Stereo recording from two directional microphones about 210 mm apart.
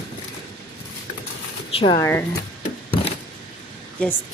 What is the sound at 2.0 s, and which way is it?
Speech, 10° left (ahead or behind).